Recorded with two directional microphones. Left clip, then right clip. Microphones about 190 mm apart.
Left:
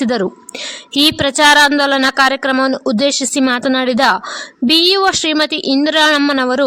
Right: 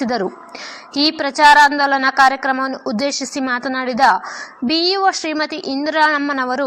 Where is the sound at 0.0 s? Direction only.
45° left (ahead or behind).